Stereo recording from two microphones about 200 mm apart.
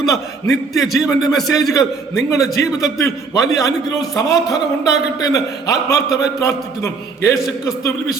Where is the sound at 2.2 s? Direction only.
15° left (ahead or behind).